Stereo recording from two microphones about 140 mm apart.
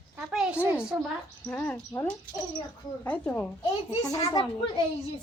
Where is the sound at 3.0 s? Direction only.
10° left (ahead or behind).